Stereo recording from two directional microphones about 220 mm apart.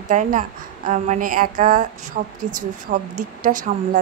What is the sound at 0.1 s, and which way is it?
A woman's voice, 35° right (ahead or behind).